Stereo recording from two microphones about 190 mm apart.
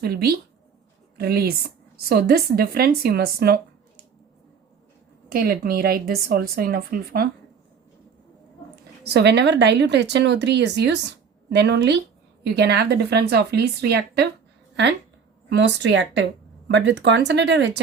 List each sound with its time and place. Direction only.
0.0 s a woman's voice: 55° right (ahead or behind)
5.3 s speech: 50° right (ahead or behind)
9.0 s speech: 60° right (ahead or behind)
15.4 s speech: 70° right (ahead or behind)